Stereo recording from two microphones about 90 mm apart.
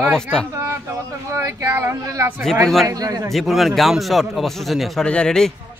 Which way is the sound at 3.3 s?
Centre (ahead or behind).